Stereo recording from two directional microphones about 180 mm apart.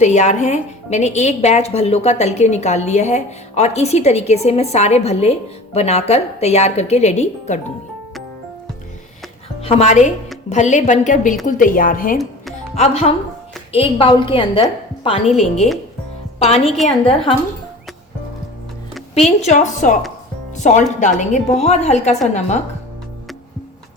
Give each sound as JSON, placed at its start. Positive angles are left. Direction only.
{"t": 0.0, "sound": "a woman's voice", "side_deg": 40}
{"t": 9.6, "sound": "a woman's voice", "side_deg": 35}
{"t": 12.7, "sound": "a woman's voice", "side_deg": 35}
{"t": 16.8, "sound": "a woman's voice", "side_deg": 35}
{"t": 19.1, "sound": "a woman's voice", "side_deg": 40}